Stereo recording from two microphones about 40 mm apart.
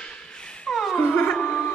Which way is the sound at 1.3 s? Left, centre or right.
Left.